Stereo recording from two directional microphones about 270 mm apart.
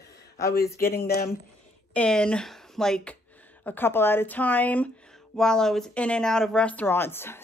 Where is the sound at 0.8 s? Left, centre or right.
Left.